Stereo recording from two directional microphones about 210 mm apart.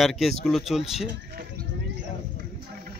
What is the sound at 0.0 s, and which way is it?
Speech, centre (ahead or behind).